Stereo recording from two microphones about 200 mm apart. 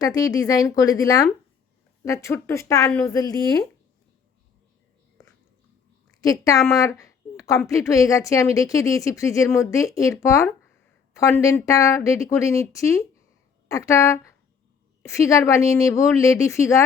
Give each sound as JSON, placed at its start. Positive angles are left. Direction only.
{"t": 0.0, "sound": "a woman's voice", "side_deg": 20}
{"t": 6.2, "sound": "a woman's voice", "side_deg": 15}